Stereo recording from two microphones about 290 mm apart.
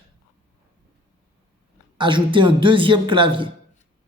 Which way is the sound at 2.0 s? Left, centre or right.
Centre.